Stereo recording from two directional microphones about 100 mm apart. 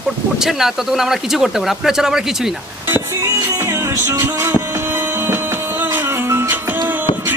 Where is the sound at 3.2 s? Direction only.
30° right (ahead or behind).